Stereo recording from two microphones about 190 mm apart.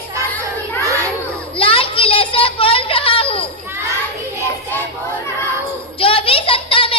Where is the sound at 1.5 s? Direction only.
30° left (ahead or behind).